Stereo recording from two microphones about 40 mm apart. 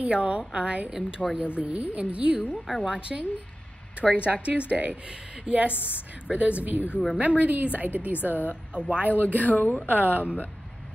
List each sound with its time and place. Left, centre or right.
0.0 s a woman's voice: right
0.9 s a woman's voice: right
1.6 s a woman's voice: right
2.5 s a woman's voice: centre; by 8.2 s right
8.2 s speech: left
9.2 s speech: right
9.5 s a woman's voice: left
9.8 s speech: right